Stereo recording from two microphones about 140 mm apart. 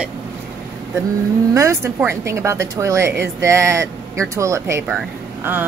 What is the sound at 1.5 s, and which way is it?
Speech, 20° right (ahead or behind).